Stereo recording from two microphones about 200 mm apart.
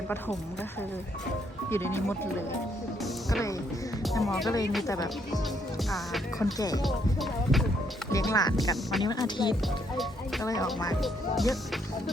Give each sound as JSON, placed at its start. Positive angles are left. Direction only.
{"t": 1.7, "sound": "speech", "side_deg": 10}
{"t": 4.2, "sound": "speech", "side_deg": 0}
{"t": 4.4, "sound": "speech", "side_deg": 20}
{"t": 6.4, "sound": "speech", "side_deg": 20}
{"t": 6.8, "sound": "speech", "side_deg": 0}
{"t": 8.1, "sound": "speech", "side_deg": 15}
{"t": 8.7, "sound": "speech", "side_deg": 0}
{"t": 9.0, "sound": "speech", "side_deg": 20}
{"t": 11.0, "sound": "speech", "side_deg": 0}